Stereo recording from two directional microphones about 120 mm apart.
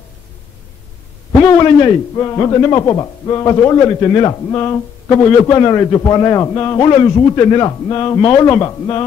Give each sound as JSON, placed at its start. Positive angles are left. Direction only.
{"t": 1.4, "sound": "a man's voice", "side_deg": 40}
{"t": 2.1, "sound": "a man's voice", "side_deg": 30}